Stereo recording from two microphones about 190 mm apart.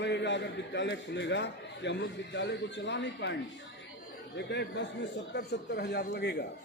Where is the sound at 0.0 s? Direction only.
65° left (ahead or behind).